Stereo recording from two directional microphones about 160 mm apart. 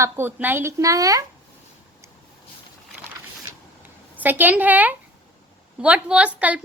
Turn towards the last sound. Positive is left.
turn(degrees=-10)  # may be behind; listen again after turning